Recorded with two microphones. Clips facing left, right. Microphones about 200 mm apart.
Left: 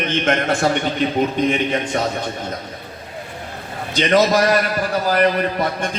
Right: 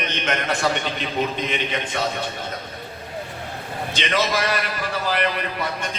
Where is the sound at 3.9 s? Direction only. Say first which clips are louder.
Left 8 dB; 40° left (ahead or behind).